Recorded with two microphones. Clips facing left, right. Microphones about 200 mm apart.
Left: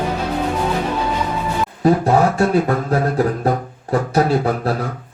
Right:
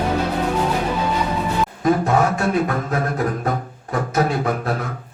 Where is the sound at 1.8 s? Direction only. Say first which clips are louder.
Left 4 dB; 35° left (ahead or behind).